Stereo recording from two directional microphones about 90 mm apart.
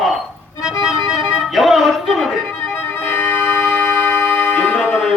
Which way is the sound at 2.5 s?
20° left (ahead or behind).